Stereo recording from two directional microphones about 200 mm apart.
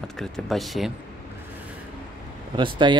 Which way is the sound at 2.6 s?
25° right (ahead or behind).